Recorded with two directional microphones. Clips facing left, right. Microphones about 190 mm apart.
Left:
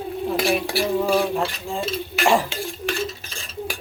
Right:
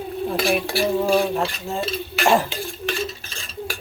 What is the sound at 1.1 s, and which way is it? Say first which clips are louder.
Speech: right 1 dB; 5° right (ahead or behind).